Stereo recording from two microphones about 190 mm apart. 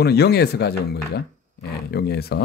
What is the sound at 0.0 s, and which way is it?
Speech, 60° left (ahead or behind).